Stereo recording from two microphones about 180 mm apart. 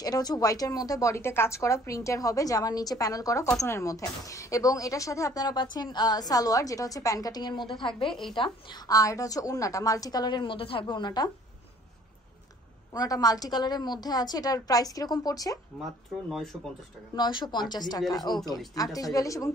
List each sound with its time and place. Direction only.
0.0 s a woman's voice: 20° left (ahead or behind)
8.1 s speech: centre (ahead or behind)
8.4 s a woman's voice: 25° left (ahead or behind)
12.9 s a woman's voice: 20° left (ahead or behind)
15.8 s speech: centre (ahead or behind)
17.1 s a woman's voice: 25° left (ahead or behind)